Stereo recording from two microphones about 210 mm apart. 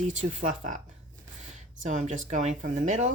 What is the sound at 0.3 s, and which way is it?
Speech, 35° right (ahead or behind).